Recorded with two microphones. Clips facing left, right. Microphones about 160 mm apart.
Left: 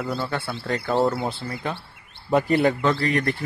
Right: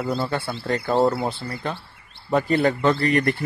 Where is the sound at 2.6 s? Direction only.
Centre (ahead or behind).